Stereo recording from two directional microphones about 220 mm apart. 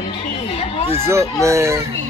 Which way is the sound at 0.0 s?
25° left (ahead or behind).